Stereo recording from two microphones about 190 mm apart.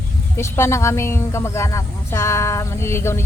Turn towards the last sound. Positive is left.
turn(degrees=15)  # may be behind; listen again after turning